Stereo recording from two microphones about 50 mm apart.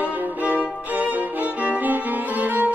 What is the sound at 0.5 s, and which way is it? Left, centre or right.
Violin, right.